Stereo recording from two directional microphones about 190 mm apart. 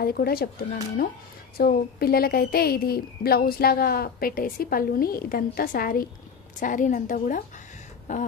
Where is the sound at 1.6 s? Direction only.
55° left (ahead or behind).